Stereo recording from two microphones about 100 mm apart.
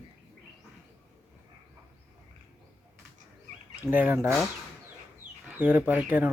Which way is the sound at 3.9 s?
20° right (ahead or behind).